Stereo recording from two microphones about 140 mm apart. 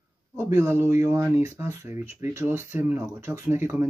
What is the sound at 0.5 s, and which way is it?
Speech, 20° right (ahead or behind).